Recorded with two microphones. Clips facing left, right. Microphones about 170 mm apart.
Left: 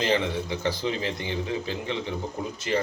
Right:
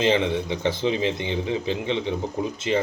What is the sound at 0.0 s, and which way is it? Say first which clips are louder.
A man's voice: right 4 dB; 20° right (ahead or behind).